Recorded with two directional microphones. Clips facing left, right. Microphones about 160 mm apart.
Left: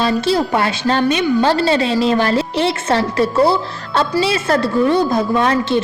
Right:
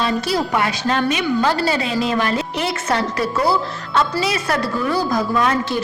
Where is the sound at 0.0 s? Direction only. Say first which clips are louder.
Left 4 dB; 25° left (ahead or behind).